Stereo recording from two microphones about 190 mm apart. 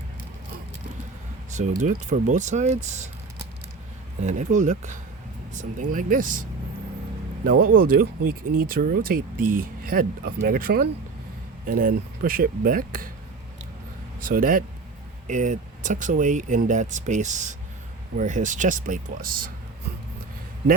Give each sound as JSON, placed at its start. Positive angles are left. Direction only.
{"t": 1.5, "sound": "speech", "side_deg": -40}
{"t": 4.2, "sound": "speech", "side_deg": -40}
{"t": 14.2, "sound": "speech", "side_deg": -45}